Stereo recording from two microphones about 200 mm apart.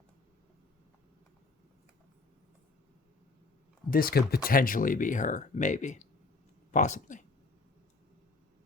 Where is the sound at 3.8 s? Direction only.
45° left (ahead or behind).